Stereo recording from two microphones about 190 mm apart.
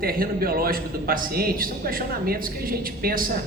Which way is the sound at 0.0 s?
50° right (ahead or behind).